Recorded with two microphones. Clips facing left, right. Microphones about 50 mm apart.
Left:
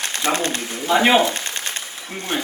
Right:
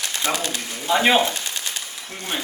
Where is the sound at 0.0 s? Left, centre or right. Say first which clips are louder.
Left 3 dB; left.